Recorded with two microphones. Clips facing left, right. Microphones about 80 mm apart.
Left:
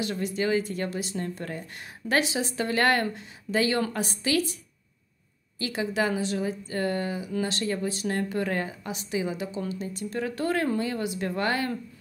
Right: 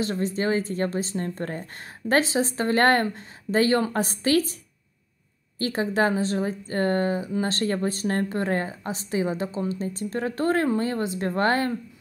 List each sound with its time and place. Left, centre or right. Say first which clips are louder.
0.0 s a woman's voice: right 3 dB; right
5.6 s a woman's voice: right 4 dB; right